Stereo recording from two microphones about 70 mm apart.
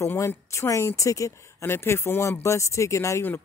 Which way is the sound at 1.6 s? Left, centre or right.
Left.